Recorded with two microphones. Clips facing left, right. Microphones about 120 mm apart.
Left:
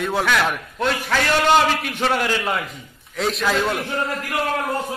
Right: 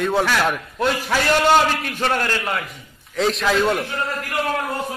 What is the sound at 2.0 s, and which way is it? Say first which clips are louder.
Speech: left 1 dB; 10° left (ahead or behind).